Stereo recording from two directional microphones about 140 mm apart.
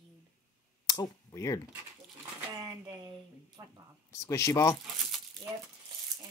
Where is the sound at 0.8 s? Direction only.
25° left (ahead or behind).